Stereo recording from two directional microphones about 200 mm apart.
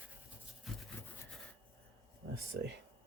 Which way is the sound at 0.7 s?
Centre (ahead or behind).